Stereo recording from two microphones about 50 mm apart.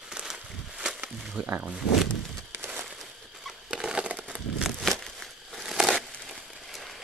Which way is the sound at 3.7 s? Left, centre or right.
Centre.